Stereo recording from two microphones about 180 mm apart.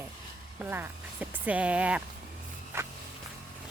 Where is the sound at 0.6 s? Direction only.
10° right (ahead or behind).